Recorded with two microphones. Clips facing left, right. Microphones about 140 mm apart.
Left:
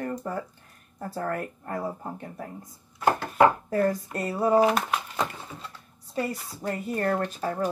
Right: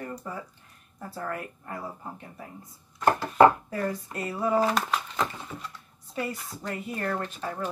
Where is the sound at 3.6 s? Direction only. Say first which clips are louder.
Left 6 dB; 40° left (ahead or behind).